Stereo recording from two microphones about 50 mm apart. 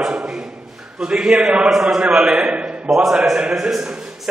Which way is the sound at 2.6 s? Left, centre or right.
Centre.